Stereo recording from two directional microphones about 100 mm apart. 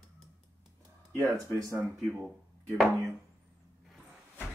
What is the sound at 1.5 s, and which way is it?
Speech, 30° right (ahead or behind).